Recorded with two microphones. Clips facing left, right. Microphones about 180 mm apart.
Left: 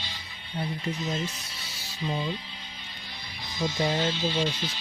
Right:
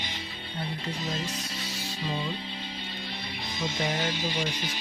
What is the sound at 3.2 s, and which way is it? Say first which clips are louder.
Music: right 6 dB; 70° right (ahead or behind).